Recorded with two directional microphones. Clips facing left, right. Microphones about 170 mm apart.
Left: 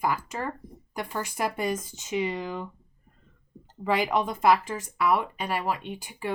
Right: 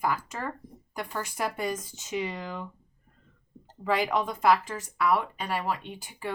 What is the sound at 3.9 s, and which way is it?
Speech, 15° left (ahead or behind).